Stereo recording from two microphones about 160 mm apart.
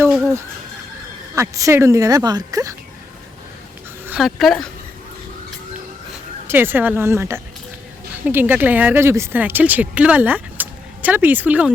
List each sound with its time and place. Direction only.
0.1 s a sound: 5° right (ahead or behind)
1.4 s speech: 20° right (ahead or behind)
4.0 s speech: 5° right (ahead or behind)
6.5 s speech: 10° right (ahead or behind)